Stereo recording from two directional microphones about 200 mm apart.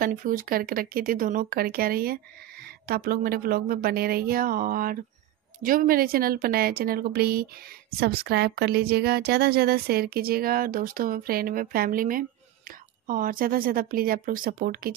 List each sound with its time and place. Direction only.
0.0 s speech: 45° right (ahead or behind)